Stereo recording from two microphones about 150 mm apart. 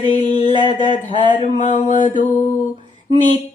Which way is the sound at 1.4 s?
50° left (ahead or behind).